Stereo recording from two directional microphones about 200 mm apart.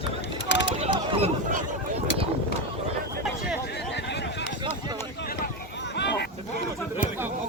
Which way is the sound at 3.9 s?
60° left (ahead or behind).